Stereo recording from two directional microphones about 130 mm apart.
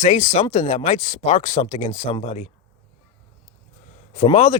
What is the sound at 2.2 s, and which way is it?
Speech, 60° left (ahead or behind).